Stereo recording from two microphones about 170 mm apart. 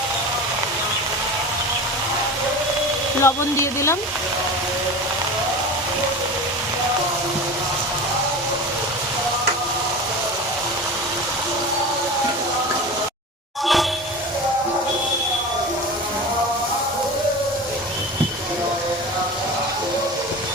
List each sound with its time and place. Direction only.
3.2 s speech: 15° left (ahead or behind)